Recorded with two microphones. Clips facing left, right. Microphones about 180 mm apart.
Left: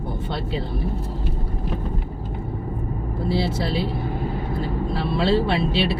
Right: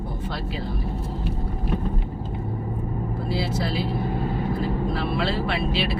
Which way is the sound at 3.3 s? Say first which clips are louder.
Left 3 dB; 30° left (ahead or behind).